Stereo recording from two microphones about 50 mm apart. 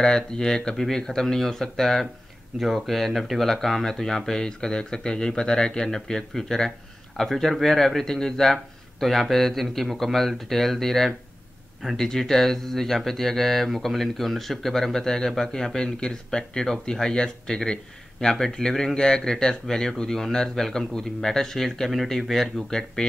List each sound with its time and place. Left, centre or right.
0.0 s speech: centre